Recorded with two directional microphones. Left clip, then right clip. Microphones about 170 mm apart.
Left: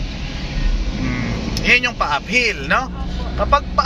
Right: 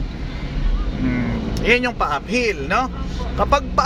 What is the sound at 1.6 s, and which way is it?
Speech, 40° right (ahead or behind).